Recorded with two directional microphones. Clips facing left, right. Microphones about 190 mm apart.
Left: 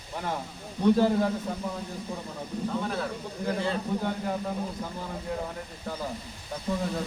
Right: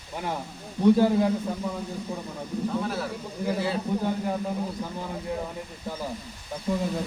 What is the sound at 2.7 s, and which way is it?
A man's voice, 5° right (ahead or behind).